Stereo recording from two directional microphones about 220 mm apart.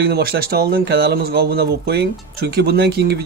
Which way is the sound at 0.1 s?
45° right (ahead or behind).